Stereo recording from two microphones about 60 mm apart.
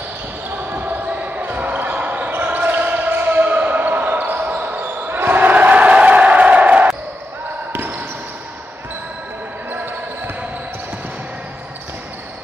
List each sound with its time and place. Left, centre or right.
0.7 s basketball bounce: right
7.7 s basketball bounce: right
9.7 s basketball bounce: right